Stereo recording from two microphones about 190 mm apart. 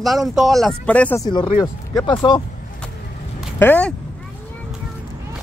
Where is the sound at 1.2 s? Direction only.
25° left (ahead or behind).